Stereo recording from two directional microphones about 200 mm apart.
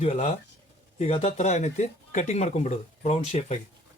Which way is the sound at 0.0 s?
35° left (ahead or behind).